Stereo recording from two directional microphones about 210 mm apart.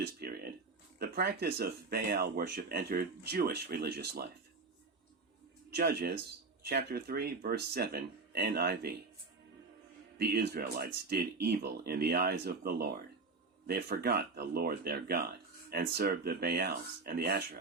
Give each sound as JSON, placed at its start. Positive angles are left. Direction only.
{"t": 0.0, "sound": "speech", "side_deg": -50}
{"t": 5.7, "sound": "speech", "side_deg": -50}
{"t": 10.2, "sound": "speech", "side_deg": -50}